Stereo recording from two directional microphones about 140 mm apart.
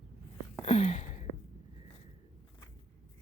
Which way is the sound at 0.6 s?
45° left (ahead or behind).